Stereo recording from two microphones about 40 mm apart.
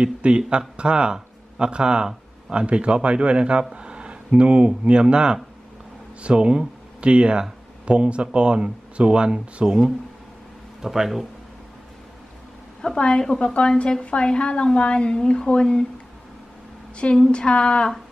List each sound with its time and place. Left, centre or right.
0.0 s speech: right
10.8 s speech: centre
12.9 s a woman's voice: left
16.9 s a woman's voice: left